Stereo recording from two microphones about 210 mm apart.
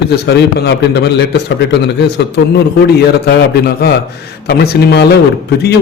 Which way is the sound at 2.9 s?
50° left (ahead or behind).